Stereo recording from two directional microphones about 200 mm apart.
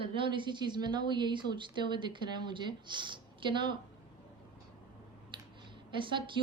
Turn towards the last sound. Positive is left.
turn(degrees=-25)  # may be behind; listen again after turning